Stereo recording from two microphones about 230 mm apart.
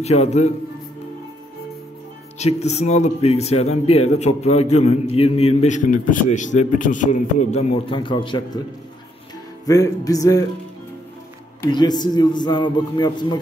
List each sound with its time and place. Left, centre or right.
0.0 s a man's voice: left
2.3 s a man's voice: left
9.7 s speech: centre
11.6 s a man's voice: centre